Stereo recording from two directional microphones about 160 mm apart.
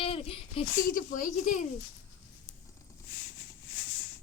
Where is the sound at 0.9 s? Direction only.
60° left (ahead or behind).